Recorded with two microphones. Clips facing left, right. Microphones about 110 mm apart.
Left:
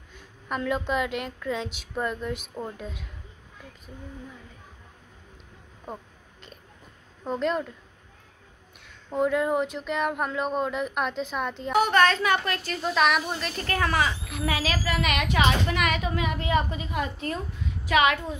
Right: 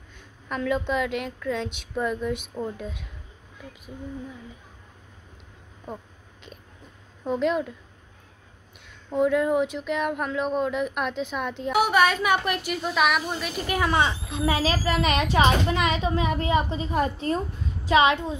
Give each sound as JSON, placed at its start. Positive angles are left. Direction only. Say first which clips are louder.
{"t": 0.5, "sound": "speech", "louder": "right 1 dB", "side_deg": 0}
{"t": 7.2, "sound": "speech", "louder": "right 3 dB", "side_deg": -5}
{"t": 9.1, "sound": "speech", "louder": "right 2 dB", "side_deg": 0}
{"t": 14.0, "sound": "a child's voice", "louder": "right 3 dB", "side_deg": -25}